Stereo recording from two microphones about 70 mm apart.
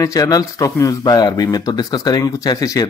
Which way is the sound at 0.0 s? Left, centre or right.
Left.